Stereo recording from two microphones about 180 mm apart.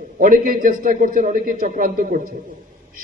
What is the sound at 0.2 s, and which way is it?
A man's voice, 50° right (ahead or behind).